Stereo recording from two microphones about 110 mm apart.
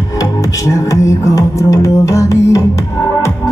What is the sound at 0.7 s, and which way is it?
Music, 30° left (ahead or behind).